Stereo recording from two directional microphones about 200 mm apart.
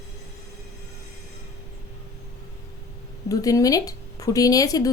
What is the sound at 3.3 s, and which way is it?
Speech, 15° left (ahead or behind).